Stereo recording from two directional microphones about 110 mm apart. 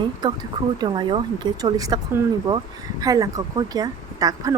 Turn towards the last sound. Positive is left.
turn(degrees=-35)  # may be behind; listen again after turning